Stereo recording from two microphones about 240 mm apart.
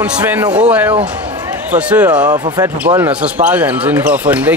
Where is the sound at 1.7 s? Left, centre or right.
Centre.